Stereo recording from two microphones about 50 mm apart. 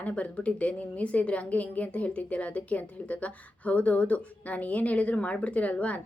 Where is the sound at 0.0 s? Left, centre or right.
Left.